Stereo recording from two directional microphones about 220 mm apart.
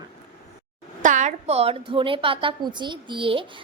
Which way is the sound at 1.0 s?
35° right (ahead or behind).